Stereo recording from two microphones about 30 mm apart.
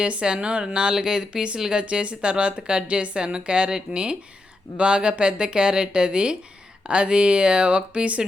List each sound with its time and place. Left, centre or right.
0.0 s speech: right